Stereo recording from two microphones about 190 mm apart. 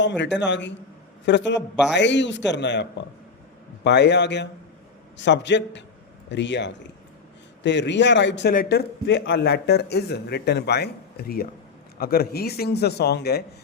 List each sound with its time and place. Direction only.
0.0 s a man's voice: 70° left (ahead or behind)
3.8 s a man's voice: 65° left (ahead or behind)